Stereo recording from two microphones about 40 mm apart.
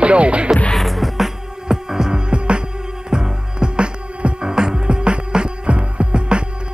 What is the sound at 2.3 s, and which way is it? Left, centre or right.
Music, right.